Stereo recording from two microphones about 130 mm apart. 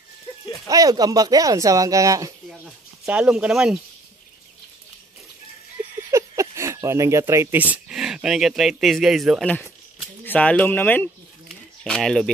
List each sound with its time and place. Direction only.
0.7 s speech: 30° right (ahead or behind)
2.6 s speech: 10° right (ahead or behind)
6.1 s a sound: 25° right (ahead or behind)
8.0 s speech: 5° right (ahead or behind)
10.2 s speech: 10° left (ahead or behind)
11.4 s a sound: centre (ahead or behind)